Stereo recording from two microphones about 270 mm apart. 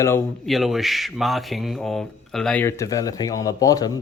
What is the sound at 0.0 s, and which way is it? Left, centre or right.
Speech, centre.